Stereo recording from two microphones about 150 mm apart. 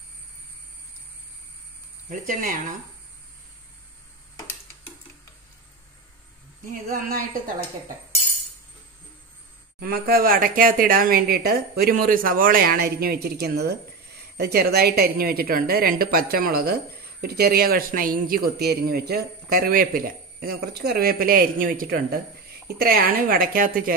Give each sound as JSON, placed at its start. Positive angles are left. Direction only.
{"t": 2.0, "sound": "speech", "side_deg": -65}
{"t": 6.7, "sound": "a woman's voice", "side_deg": -70}
{"t": 9.8, "sound": "a man's voice", "side_deg": -85}
{"t": 22.8, "sound": "a woman's voice", "side_deg": -90}